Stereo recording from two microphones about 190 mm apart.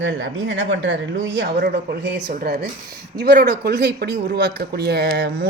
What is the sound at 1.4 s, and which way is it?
Speech, 55° right (ahead or behind).